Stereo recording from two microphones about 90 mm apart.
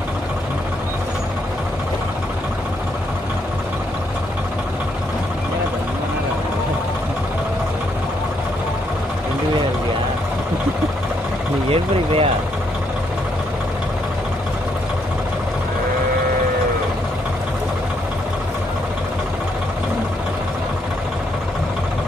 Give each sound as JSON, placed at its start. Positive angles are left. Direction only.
{"t": 11.7, "sound": "speech", "side_deg": -90}